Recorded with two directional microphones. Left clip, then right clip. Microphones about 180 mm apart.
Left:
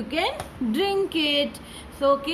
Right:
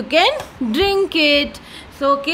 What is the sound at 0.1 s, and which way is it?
A woman's voice, 55° right (ahead or behind).